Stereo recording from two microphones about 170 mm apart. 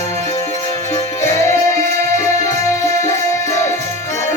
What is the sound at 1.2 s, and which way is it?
Music, 15° left (ahead or behind).